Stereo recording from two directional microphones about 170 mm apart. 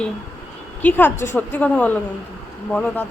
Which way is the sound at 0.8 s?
10° left (ahead or behind).